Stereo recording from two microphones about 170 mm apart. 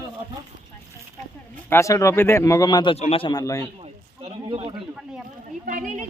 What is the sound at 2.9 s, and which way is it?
Speech, 35° left (ahead or behind).